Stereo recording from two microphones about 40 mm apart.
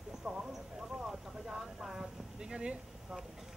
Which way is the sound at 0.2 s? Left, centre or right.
Centre.